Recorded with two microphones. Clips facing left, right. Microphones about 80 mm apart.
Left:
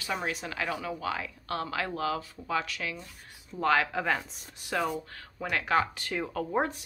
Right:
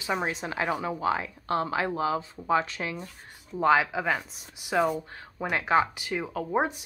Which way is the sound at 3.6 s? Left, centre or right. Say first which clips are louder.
Right 3 dB; centre.